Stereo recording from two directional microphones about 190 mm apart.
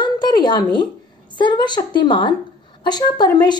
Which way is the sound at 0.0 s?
20° left (ahead or behind).